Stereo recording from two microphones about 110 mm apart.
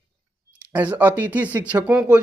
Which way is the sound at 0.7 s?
15° right (ahead or behind).